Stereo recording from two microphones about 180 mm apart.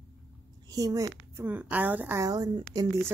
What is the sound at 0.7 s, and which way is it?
Speech, 20° right (ahead or behind).